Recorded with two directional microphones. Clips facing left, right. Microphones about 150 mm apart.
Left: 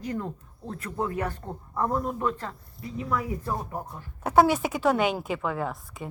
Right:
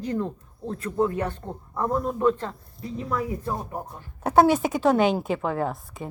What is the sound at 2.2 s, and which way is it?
A woman's voice, 25° right (ahead or behind).